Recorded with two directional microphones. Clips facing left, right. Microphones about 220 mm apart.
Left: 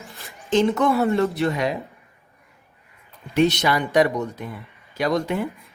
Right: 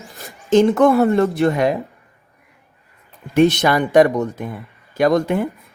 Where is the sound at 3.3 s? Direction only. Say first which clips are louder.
Right 5 dB; 50° right (ahead or behind).